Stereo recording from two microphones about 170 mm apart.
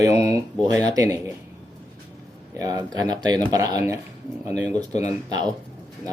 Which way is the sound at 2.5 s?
20° right (ahead or behind).